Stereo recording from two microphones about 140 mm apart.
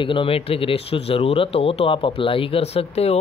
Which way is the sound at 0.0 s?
40° left (ahead or behind).